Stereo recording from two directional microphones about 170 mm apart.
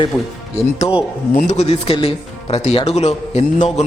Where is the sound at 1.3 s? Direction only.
45° left (ahead or behind).